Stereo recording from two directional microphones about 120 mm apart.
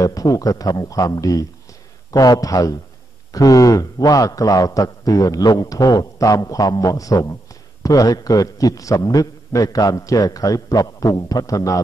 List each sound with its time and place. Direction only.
0.0 s a man's voice: 30° left (ahead or behind)